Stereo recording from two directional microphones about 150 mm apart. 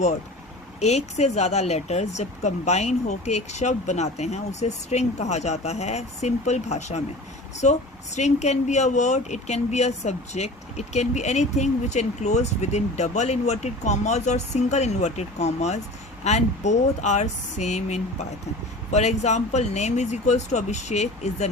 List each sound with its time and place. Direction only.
0.8 s speech: 45° left (ahead or behind)